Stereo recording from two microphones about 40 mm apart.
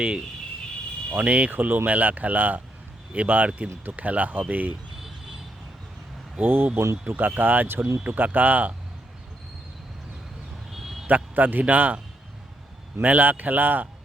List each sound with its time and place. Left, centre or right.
1.1 s speech: right
1.5 s speech: right
6.4 s speech: right
7.1 s speech: right
10.7 s a sound: centre
11.0 s a man's voice: right
13.0 s speech: right